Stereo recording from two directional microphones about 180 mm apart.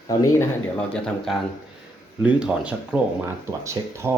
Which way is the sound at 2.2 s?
5° right (ahead or behind).